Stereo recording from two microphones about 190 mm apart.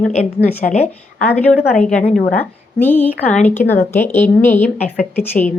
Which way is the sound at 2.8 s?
10° left (ahead or behind).